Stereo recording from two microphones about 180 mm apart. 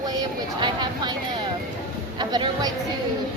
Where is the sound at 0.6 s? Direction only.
25° right (ahead or behind).